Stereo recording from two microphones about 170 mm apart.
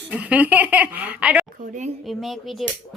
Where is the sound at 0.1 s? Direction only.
10° right (ahead or behind).